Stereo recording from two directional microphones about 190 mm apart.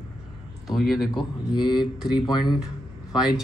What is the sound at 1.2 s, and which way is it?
Speech, 25° left (ahead or behind).